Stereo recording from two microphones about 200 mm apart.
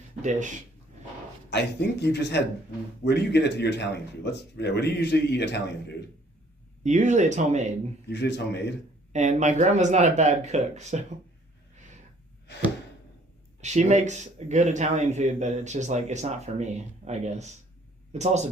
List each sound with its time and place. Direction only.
0.2 s speech: 40° right (ahead or behind)
1.5 s speech: 60° left (ahead or behind)
6.8 s speech: 35° right (ahead or behind)
8.1 s speech: 60° left (ahead or behind)
9.1 s speech: 35° right (ahead or behind)
13.6 s speech: 35° right (ahead or behind)